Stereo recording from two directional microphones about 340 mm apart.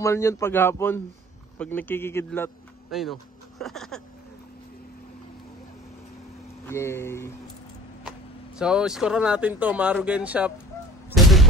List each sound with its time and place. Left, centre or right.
0.0 s a man's voice: centre
6.6 s a man's voice: centre
8.5 s speech: centre
11.1 s a sound: centre